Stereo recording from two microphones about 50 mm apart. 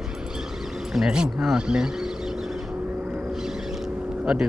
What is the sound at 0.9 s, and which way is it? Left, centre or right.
Speech, centre.